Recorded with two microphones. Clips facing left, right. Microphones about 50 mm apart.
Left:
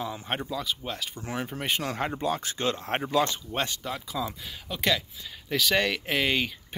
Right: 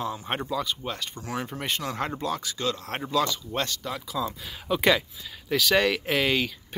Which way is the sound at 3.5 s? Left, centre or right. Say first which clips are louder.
Right 1 dB; centre.